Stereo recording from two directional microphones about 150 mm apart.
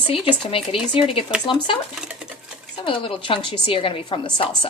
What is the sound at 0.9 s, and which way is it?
Speech, 35° left (ahead or behind).